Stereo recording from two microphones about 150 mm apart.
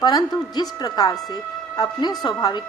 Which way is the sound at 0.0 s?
30° left (ahead or behind).